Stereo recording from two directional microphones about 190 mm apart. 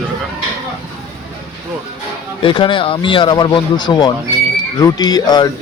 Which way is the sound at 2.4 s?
25° left (ahead or behind).